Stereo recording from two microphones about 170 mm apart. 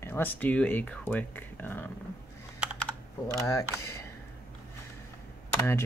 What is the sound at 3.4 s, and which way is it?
Speech, 20° left (ahead or behind).